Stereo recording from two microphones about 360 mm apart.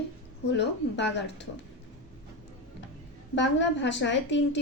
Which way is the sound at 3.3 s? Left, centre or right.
Left.